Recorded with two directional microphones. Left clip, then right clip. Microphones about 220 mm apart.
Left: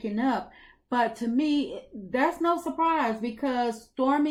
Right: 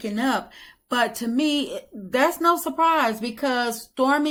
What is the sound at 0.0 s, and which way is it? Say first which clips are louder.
Speech: right 4 dB; 15° right (ahead or behind).